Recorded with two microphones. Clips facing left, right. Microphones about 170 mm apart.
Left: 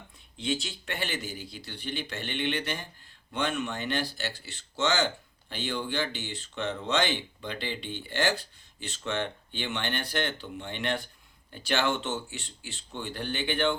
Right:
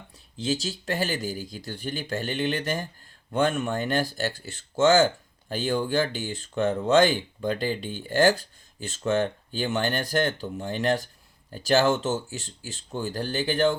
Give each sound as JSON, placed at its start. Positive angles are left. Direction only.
{"t": 0.3, "sound": "speech", "side_deg": -40}